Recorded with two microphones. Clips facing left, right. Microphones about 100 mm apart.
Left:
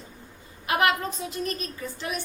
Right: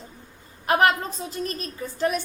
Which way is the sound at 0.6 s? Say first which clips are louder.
Right 4 dB; 40° right (ahead or behind).